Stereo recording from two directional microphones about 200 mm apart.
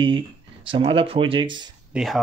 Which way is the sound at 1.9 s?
Centre (ahead or behind).